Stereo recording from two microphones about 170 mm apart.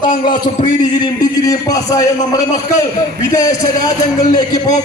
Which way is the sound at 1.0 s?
20° left (ahead or behind).